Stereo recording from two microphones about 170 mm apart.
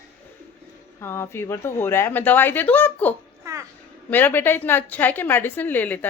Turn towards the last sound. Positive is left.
turn(degrees=10)  # may be behind; listen again after turning